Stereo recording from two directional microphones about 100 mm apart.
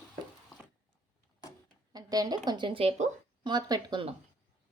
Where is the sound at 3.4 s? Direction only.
45° right (ahead or behind).